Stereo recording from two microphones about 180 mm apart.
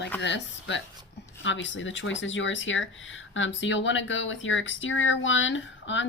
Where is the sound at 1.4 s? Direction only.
90° left.